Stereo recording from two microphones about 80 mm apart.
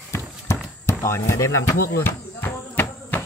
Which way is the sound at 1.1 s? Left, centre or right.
Left.